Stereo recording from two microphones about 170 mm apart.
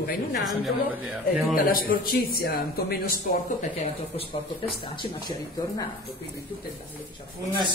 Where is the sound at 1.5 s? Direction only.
60° left (ahead or behind).